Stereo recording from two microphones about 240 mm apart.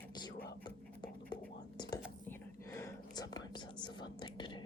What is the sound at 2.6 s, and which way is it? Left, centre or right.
Whispering, centre.